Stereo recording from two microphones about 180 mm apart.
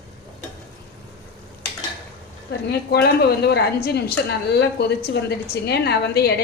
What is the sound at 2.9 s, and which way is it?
A woman's voice, 65° left (ahead or behind).